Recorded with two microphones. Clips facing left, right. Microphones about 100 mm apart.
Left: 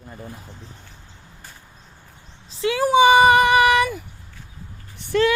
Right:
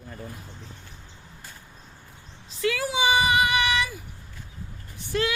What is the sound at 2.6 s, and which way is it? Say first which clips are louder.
Speech: left 5 dB; 30° left (ahead or behind).